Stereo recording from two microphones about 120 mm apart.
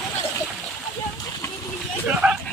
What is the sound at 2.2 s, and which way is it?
Speech, 5° right (ahead or behind).